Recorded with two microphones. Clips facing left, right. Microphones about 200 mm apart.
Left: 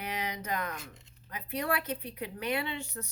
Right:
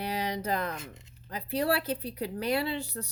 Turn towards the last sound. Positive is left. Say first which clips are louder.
# right 5 dB
turn(degrees=-35)  # may be behind; listen again after turning